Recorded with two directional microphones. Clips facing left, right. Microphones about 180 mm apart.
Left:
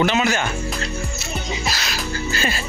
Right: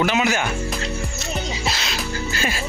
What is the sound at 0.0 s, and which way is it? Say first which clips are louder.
Speech: left 1 dB; 10° right (ahead or behind).